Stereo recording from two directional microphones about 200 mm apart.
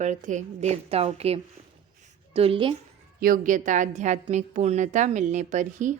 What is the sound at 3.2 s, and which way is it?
A woman's voice, 40° right (ahead or behind).